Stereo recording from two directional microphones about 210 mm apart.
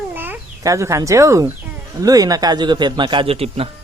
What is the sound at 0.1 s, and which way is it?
A man's voice, 10° right (ahead or behind).